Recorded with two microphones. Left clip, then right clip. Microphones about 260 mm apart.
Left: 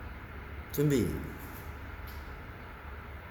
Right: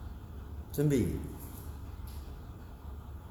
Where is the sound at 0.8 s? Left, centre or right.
Left.